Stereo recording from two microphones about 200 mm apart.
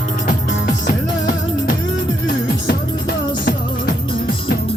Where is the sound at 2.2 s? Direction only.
50° left (ahead or behind).